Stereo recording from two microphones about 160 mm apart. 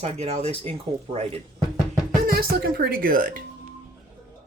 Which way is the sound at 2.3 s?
75° right (ahead or behind).